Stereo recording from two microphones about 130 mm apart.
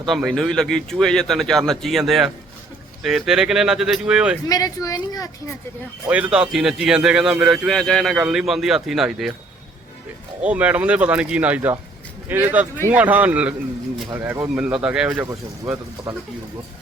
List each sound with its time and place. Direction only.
0.0 s a man's voice: centre (ahead or behind)
4.4 s speech: 30° left (ahead or behind)
6.1 s a man's voice: 10° right (ahead or behind)
10.4 s speech: 10° right (ahead or behind)
15.3 s speech: 20° right (ahead or behind)